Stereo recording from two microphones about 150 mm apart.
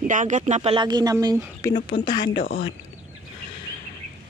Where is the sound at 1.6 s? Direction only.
30° left (ahead or behind).